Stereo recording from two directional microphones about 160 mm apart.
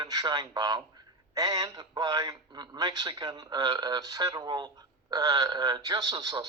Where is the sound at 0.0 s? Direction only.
25° right (ahead or behind).